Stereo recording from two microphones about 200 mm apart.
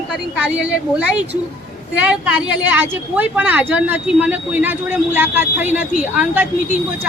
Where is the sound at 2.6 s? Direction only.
10° right (ahead or behind).